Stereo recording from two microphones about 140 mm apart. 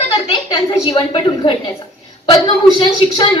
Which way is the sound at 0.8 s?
35° left (ahead or behind).